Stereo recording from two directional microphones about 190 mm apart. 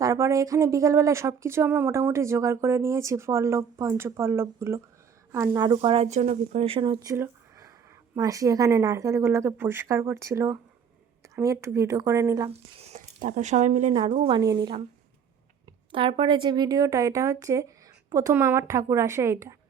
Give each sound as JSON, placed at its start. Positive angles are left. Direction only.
{"t": 0.0, "sound": "speech", "side_deg": -15}
{"t": 5.5, "sound": "speech", "side_deg": -25}
{"t": 11.6, "sound": "speech", "side_deg": -15}
{"t": 12.5, "sound": "speech", "side_deg": -35}
{"t": 13.9, "sound": "speech", "side_deg": -30}
{"t": 15.9, "sound": "speech", "side_deg": -25}